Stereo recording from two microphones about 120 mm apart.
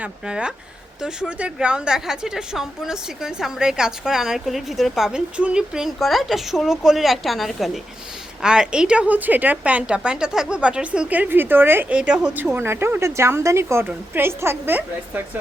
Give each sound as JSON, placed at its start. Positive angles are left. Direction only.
{"t": 0.0, "sound": "a woman's voice", "side_deg": -5}
{"t": 12.5, "sound": "a woman's voice", "side_deg": -20}